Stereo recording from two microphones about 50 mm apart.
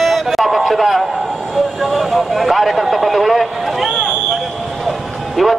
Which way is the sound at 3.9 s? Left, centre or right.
Centre.